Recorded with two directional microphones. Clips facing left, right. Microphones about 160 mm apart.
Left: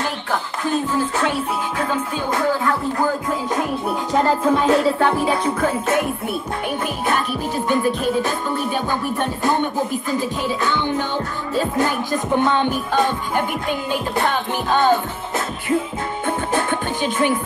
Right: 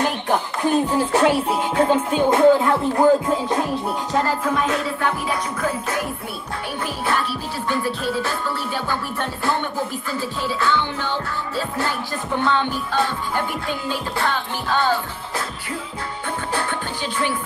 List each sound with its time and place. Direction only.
0.0 s music: 20° right (ahead or behind)
4.5 s music: 30° left (ahead or behind)
7.1 s music: 20° left (ahead or behind)
16.3 s music: 20° left (ahead or behind)